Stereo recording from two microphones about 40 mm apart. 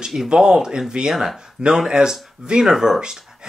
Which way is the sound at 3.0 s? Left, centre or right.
Centre.